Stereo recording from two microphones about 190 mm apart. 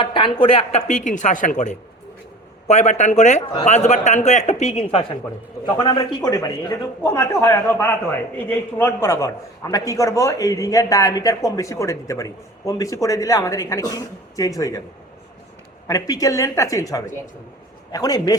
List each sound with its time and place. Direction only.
0.0 s speech: 25° left (ahead or behind)
5.6 s speech: 20° left (ahead or behind)
15.9 s a man's voice: 20° left (ahead or behind)